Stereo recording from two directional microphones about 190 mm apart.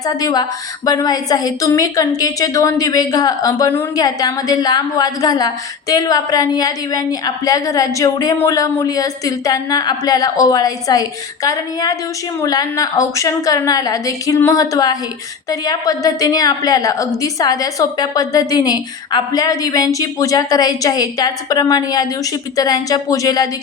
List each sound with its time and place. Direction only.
0.0 s a woman's voice: 20° left (ahead or behind)